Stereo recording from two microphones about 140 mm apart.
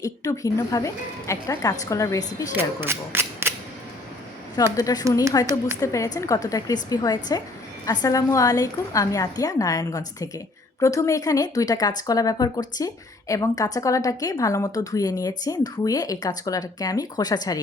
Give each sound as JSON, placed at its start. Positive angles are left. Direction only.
{"t": 0.0, "sound": "speech", "side_deg": 25}
{"t": 2.5, "sound": "speech", "side_deg": -15}
{"t": 4.5, "sound": "speech", "side_deg": 25}